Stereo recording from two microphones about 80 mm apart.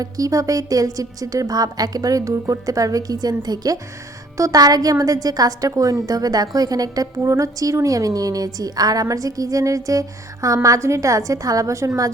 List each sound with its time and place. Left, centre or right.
0.0 s a woman's voice: right